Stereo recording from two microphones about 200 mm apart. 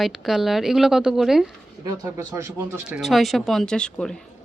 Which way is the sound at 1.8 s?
20° right (ahead or behind).